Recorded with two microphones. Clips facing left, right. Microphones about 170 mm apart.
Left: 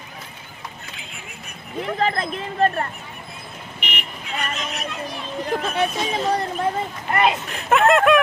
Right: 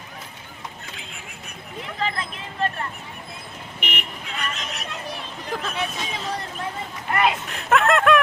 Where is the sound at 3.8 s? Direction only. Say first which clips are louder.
Right 1 dB; 50° right (ahead or behind).